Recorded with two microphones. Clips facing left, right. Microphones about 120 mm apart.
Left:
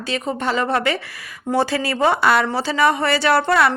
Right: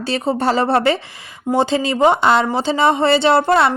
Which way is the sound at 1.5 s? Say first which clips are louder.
Right 3 dB; 20° right (ahead or behind).